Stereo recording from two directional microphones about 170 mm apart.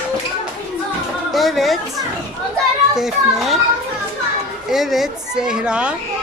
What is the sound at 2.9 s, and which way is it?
Speech, 5° right (ahead or behind).